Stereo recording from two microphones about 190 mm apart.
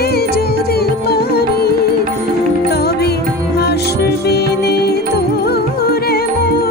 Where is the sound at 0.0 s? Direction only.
55° left (ahead or behind).